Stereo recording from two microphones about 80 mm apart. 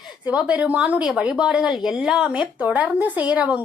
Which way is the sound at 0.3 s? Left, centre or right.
Centre.